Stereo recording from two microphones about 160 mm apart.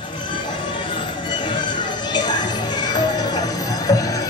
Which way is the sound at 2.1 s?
30° left (ahead or behind).